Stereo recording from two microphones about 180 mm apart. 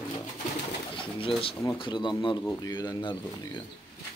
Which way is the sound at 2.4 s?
10° left (ahead or behind).